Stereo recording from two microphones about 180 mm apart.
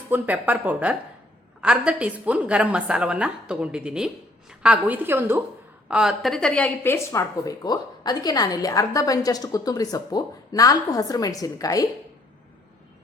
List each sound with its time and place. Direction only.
0.1 s a woman's voice: 10° right (ahead or behind); by 11.9 s 20° left (ahead or behind)